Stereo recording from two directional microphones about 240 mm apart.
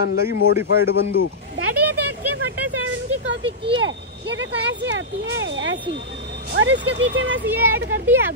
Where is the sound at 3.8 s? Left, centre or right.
Right.